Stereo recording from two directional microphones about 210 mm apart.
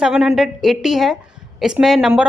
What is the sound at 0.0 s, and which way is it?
A woman's voice, 5° right (ahead or behind).